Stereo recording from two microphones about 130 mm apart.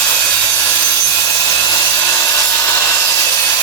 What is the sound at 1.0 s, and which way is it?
Wood, 20° left (ahead or behind).